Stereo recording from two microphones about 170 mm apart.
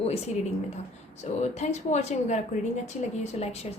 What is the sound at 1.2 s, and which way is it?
A woman's voice, 40° left (ahead or behind).